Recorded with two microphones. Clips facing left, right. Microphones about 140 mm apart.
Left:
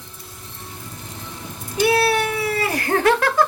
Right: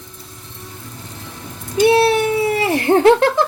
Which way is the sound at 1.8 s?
25° right (ahead or behind).